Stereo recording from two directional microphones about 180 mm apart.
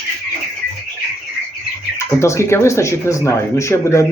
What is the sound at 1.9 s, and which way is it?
Speech, 15° left (ahead or behind).